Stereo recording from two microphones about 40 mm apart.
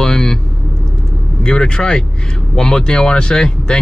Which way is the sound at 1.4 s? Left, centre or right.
Centre.